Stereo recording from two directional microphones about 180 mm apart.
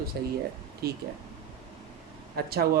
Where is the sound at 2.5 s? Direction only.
60° right (ahead or behind).